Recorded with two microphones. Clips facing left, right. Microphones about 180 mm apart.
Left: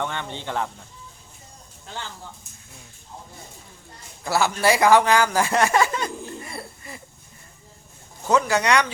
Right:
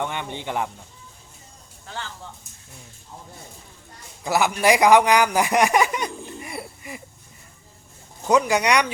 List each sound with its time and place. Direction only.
0.0 s speech: 15° right (ahead or behind)
4.2 s a man's voice: 15° right (ahead or behind)
8.3 s speech: 15° right (ahead or behind)